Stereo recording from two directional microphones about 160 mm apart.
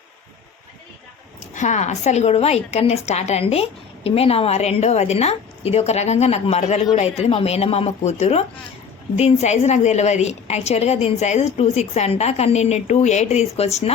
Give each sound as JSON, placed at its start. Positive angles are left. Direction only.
{"t": 1.5, "sound": "a woman's voice", "side_deg": 50}